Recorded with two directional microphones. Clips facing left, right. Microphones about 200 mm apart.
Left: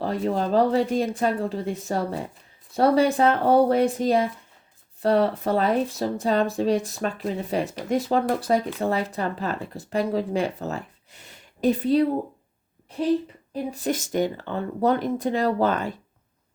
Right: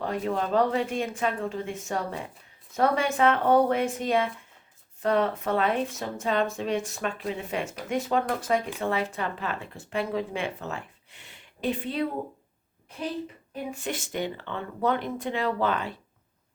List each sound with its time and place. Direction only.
0.0 s speech: 35° left (ahead or behind)
13.5 s speech: 35° left (ahead or behind)